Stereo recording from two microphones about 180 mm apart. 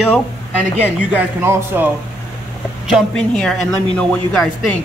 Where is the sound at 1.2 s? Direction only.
10° right (ahead or behind).